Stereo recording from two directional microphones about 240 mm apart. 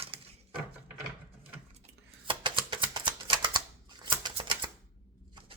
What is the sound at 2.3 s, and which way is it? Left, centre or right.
Shuffling cards, centre.